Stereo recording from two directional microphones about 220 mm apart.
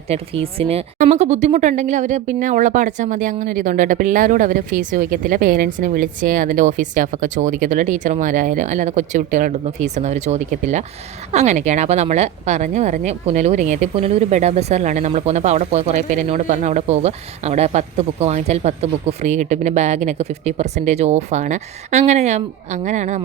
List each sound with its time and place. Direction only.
0.1 s a woman's voice: 25° right (ahead or behind)